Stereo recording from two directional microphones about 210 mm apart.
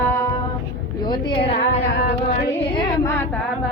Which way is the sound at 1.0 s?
20° left (ahead or behind).